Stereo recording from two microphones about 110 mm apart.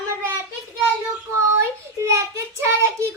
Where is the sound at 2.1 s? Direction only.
25° right (ahead or behind).